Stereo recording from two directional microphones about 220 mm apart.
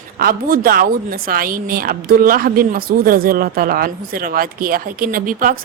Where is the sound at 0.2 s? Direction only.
40° right (ahead or behind).